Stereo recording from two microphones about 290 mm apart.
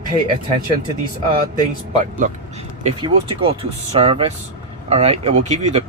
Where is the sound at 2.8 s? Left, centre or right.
Centre.